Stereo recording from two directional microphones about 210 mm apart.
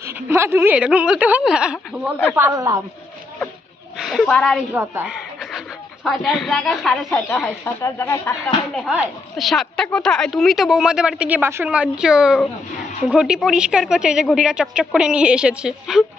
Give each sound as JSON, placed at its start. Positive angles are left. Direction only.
{"t": 0.0, "sound": "a woman's voice", "side_deg": -10}
{"t": 4.0, "sound": "speech", "side_deg": 0}
{"t": 4.7, "sound": "a sound", "side_deg": -5}
{"t": 6.0, "sound": "a woman's voice", "side_deg": 0}
{"t": 8.8, "sound": "a woman's voice", "side_deg": 0}